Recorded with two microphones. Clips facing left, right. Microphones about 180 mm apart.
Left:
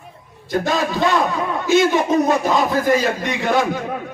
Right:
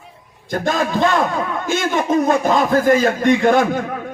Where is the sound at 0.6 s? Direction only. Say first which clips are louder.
Right 2 dB; 50° right (ahead or behind).